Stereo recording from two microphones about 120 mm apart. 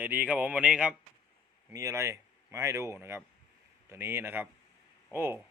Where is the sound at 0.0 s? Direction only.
15° right (ahead or behind).